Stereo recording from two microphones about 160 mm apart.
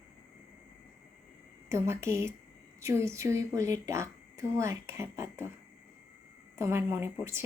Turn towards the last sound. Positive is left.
turn(degrees=-15)  # may be behind; listen again after turning